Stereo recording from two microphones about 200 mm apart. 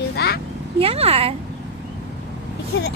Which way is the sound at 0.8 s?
30° right (ahead or behind).